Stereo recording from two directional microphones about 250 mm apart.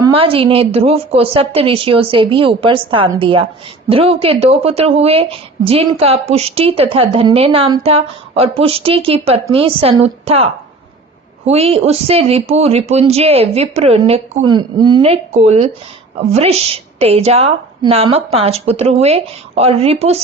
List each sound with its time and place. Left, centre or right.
0.0 s a woman's voice: right